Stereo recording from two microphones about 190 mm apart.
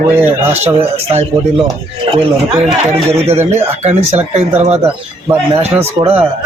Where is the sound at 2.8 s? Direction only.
35° right (ahead or behind).